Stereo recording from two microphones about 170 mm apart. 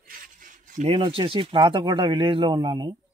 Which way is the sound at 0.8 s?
30° right (ahead or behind).